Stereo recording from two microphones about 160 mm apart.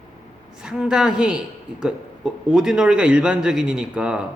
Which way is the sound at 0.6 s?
5° right (ahead or behind).